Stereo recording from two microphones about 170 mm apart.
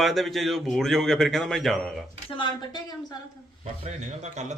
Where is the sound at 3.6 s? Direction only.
40° right (ahead or behind).